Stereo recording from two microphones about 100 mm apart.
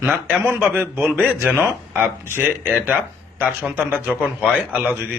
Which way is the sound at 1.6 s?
20° right (ahead or behind).